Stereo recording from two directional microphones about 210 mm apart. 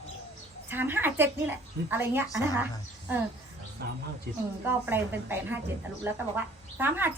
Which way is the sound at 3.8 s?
50° right (ahead or behind).